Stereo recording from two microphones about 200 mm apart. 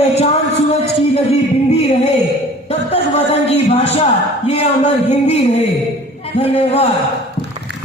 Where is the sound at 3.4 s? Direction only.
30° left (ahead or behind).